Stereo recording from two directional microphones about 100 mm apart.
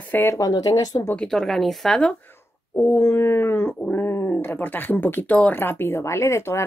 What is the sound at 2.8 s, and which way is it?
Speech, 25° left (ahead or behind).